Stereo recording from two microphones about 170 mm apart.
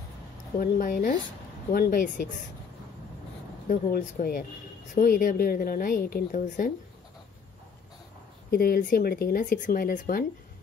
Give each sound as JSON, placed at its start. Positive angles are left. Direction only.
{"t": 0.6, "sound": "speech", "side_deg": 55}
{"t": 3.9, "sound": "a woman's voice", "side_deg": 60}
{"t": 8.5, "sound": "a woman's voice", "side_deg": 60}